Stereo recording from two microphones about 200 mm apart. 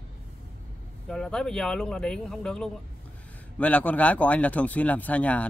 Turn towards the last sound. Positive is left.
turn(degrees=5)  # may be behind; listen again after turning